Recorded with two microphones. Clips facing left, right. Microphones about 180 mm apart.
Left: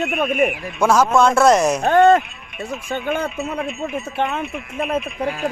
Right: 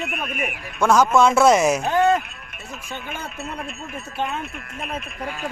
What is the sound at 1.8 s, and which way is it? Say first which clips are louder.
Speech: left 6 dB; 60° left (ahead or behind).